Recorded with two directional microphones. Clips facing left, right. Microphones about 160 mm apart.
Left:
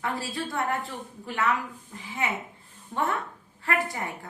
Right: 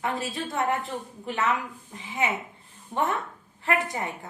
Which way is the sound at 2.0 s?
20° right (ahead or behind).